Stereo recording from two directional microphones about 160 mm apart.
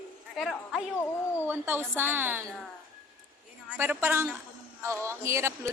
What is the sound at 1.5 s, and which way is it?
Speech, 15° right (ahead or behind).